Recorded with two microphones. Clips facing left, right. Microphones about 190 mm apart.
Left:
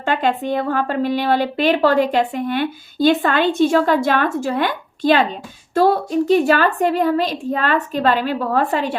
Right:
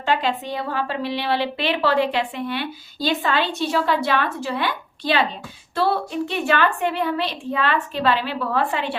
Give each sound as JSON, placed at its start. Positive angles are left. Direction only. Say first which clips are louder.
{"t": 0.0, "sound": "a woman's voice", "louder": "left 3 dB", "side_deg": 50}